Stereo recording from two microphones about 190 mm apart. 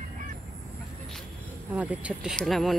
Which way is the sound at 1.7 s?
5° right (ahead or behind).